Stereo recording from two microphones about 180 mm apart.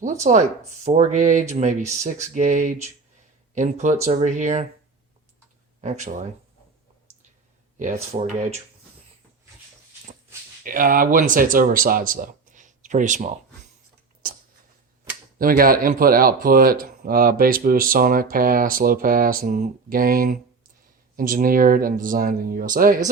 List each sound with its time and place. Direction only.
0.0 s speech: 45° right (ahead or behind)
5.8 s speech: 40° right (ahead or behind)
8.2 s speech: 40° right (ahead or behind)
10.6 s speech: 50° right (ahead or behind)
15.4 s speech: 50° right (ahead or behind)